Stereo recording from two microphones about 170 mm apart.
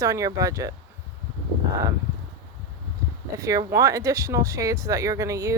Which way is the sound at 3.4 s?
20° right (ahead or behind).